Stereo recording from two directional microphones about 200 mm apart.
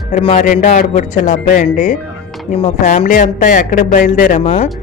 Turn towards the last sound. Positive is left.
turn(degrees=35)  # may be behind; listen again after turning